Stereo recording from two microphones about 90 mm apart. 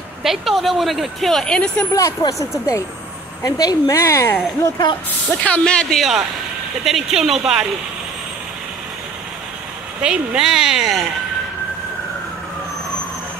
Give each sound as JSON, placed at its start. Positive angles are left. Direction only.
{"t": 0.2, "sound": "speech", "side_deg": 0}
{"t": 2.0, "sound": "a woman's voice", "side_deg": 35}
{"t": 5.4, "sound": "speech", "side_deg": 10}
{"t": 10.0, "sound": "speech", "side_deg": -10}